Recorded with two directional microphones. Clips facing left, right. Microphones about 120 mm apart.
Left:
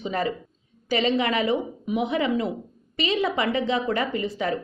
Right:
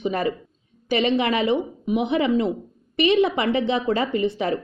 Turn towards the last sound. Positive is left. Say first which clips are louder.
# right 4 dB
turn(degrees=-25)  # may be behind; listen again after turning